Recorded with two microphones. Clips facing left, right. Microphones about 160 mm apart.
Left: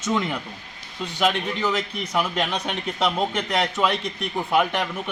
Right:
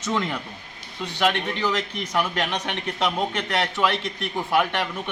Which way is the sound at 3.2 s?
20° left (ahead or behind).